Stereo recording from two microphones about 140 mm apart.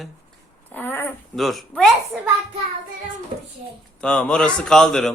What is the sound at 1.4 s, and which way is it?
Speech, centre (ahead or behind).